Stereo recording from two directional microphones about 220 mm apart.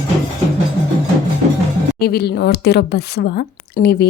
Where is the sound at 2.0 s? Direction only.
45° left (ahead or behind).